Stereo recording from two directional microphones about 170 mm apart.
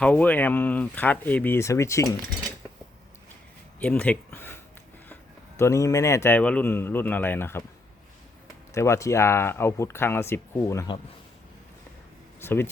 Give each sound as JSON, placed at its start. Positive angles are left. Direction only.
{"t": 0.0, "sound": "speech", "side_deg": 10}
{"t": 3.8, "sound": "a sound", "side_deg": 10}
{"t": 5.5, "sound": "speech", "side_deg": 15}
{"t": 8.7, "sound": "speech", "side_deg": 15}
{"t": 12.4, "sound": "speech", "side_deg": 15}